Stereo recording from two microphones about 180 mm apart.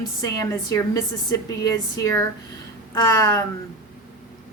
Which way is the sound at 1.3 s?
20° left (ahead or behind).